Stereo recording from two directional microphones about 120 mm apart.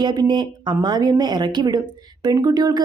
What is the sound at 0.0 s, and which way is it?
Speech, 40° right (ahead or behind).